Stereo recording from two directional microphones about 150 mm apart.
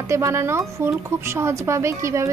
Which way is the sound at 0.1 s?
20° right (ahead or behind).